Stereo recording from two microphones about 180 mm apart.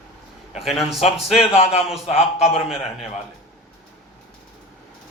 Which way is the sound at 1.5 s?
35° left (ahead or behind).